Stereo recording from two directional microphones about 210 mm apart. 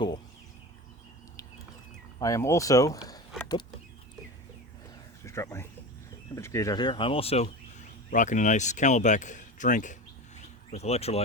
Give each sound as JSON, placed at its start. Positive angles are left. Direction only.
{"t": 2.1, "sound": "speech", "side_deg": 15}
{"t": 5.2, "sound": "a sound", "side_deg": 15}
{"t": 6.3, "sound": "speech", "side_deg": 15}